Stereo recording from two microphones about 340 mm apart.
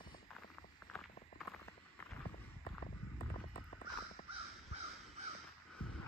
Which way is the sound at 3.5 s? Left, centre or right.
Centre.